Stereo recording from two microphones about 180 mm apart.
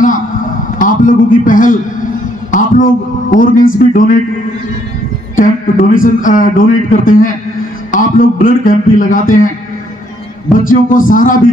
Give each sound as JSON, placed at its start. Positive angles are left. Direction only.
{"t": 0.0, "sound": "a sound", "side_deg": 45}
{"t": 2.5, "sound": "speech", "side_deg": 50}
{"t": 5.3, "sound": "speech", "side_deg": 50}
{"t": 10.5, "sound": "speech", "side_deg": 50}